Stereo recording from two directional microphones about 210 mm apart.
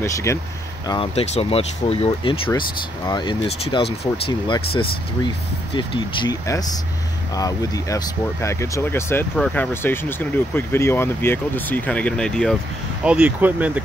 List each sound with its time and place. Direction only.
0.0 s speech: 15° left (ahead or behind)
0.8 s speech: 25° left (ahead or behind)
5.8 s speech: 20° left (ahead or behind); by 13.8 s 5° right (ahead or behind)